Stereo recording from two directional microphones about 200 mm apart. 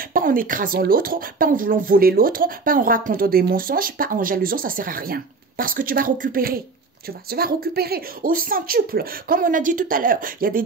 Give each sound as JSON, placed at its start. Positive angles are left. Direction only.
{"t": 0.0, "sound": "speech", "side_deg": -45}